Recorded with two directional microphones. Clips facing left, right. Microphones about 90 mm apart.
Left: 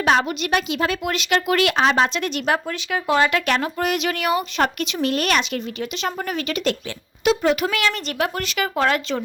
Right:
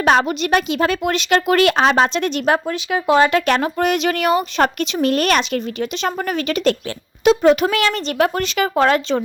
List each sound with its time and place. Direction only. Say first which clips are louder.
0.0 s a woman's voice: right 3 dB; 40° right (ahead or behind)
2.0 s a woman's voice: right 4 dB; 30° right (ahead or behind)
2.7 s a woman's voice: right 5 dB; 20° right (ahead or behind); by 6.1 s 40° right (ahead or behind)
6.1 s a woman's voice: right 4 dB; 50° right (ahead or behind)